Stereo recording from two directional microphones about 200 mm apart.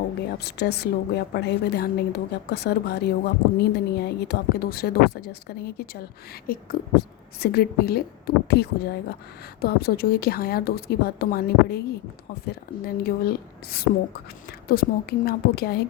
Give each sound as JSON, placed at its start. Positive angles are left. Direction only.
{"t": 0.3, "sound": "a woman's voice", "side_deg": 55}